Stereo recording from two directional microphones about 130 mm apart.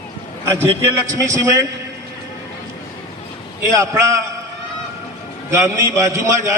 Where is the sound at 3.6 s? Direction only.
25° right (ahead or behind).